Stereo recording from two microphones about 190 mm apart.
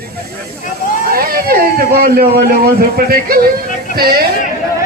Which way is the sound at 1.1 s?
50° right (ahead or behind).